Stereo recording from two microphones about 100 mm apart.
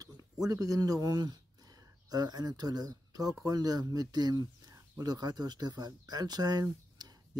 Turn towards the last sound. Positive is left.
turn(degrees=-40)  # may be behind; listen again after turning